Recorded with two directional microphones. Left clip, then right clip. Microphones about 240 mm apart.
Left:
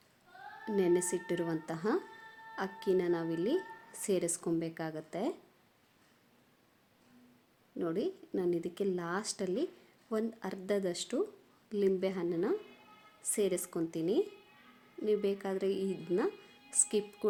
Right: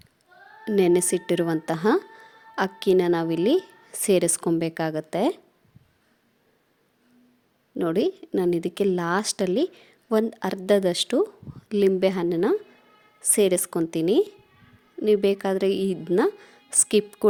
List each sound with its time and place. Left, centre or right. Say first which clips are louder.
0.6 s a woman's voice: right 10 dB; right
7.8 s a woman's voice: right 12 dB; right